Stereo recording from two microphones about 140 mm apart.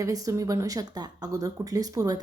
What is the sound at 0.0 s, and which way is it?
A woman's voice, 25° right (ahead or behind).